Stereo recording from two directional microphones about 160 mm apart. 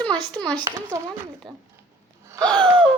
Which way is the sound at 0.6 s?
20° right (ahead or behind).